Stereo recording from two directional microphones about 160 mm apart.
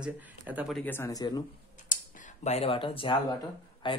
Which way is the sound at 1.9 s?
55° left (ahead or behind).